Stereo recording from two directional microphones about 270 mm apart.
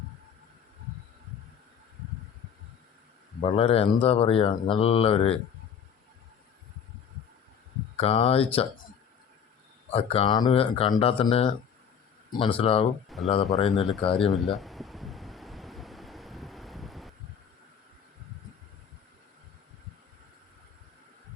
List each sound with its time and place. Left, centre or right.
3.5 s speech: left
7.9 s speech: left
9.9 s speech: left
13.1 s speech: centre
13.8 s a sound: centre